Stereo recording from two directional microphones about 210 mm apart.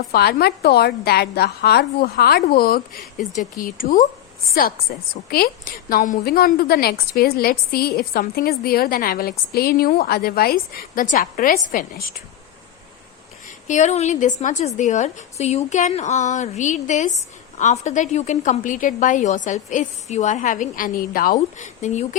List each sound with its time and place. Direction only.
0.1 s a woman's voice: 45° left (ahead or behind)
13.7 s a woman's voice: 35° left (ahead or behind)